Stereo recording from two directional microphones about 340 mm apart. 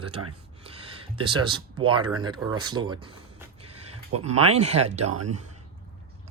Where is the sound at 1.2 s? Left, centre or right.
Centre.